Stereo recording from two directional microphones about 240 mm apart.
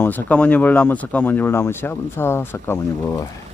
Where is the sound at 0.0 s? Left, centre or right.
Centre.